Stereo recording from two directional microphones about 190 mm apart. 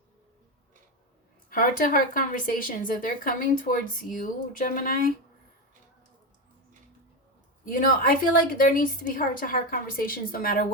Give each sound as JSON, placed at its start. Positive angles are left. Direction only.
{"t": 1.5, "sound": "a woman's voice", "side_deg": 45}
{"t": 7.6, "sound": "a woman's voice", "side_deg": 45}